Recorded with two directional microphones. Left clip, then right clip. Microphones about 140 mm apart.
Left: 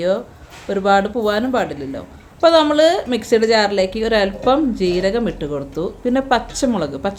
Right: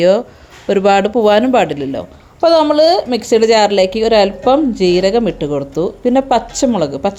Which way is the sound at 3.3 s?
35° right (ahead or behind).